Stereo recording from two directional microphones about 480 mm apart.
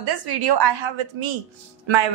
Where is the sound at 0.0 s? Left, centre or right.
Right.